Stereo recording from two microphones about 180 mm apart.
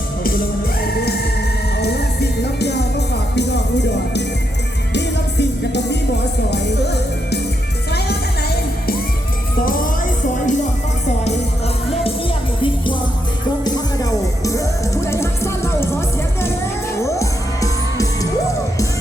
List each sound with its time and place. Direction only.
1.8 s music: 65° left (ahead or behind)
9.6 s music: 50° left (ahead or behind)
12.6 s music: 25° left (ahead or behind)